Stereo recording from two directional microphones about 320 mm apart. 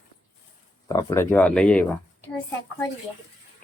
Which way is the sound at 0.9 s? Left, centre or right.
Centre.